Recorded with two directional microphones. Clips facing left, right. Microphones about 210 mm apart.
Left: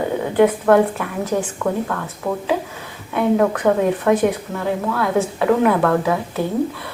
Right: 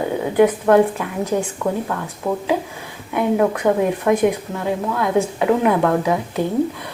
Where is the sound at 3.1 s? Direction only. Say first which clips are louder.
Left 1 dB; 10° right (ahead or behind).